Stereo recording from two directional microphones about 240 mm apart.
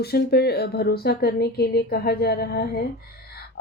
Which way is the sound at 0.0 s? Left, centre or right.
Left.